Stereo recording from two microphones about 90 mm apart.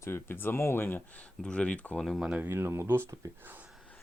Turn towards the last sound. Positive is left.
turn(degrees=-25)  # may be behind; listen again after turning